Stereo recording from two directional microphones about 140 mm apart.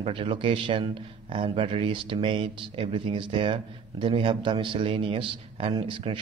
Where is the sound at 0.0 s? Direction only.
40° right (ahead or behind).